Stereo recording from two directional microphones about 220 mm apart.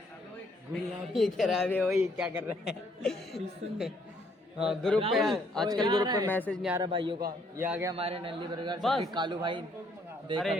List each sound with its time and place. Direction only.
1.1 s a man's voice: centre (ahead or behind)
5.8 s speech: 20° right (ahead or behind)
6.2 s a man's voice: 10° left (ahead or behind)
6.7 s speech: 20° right (ahead or behind)
7.5 s a man's voice: 10° right (ahead or behind)
7.9 s speech: 25° right (ahead or behind)
8.8 s a man's voice: centre (ahead or behind)
9.1 s speech: 20° right (ahead or behind)